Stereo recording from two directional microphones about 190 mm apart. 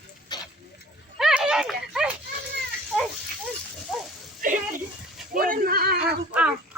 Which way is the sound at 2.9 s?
5° right (ahead or behind).